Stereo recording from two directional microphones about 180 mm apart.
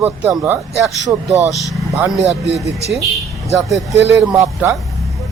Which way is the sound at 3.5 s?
Centre (ahead or behind).